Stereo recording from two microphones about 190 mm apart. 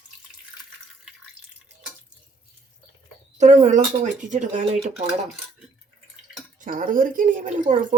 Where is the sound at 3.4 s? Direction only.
40° right (ahead or behind).